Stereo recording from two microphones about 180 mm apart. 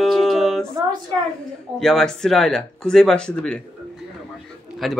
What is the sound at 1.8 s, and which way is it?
Speech, centre (ahead or behind).